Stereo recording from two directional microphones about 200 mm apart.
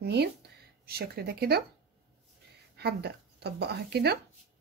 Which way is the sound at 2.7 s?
55° right (ahead or behind).